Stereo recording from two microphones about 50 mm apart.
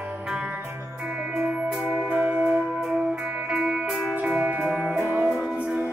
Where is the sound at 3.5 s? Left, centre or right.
Centre.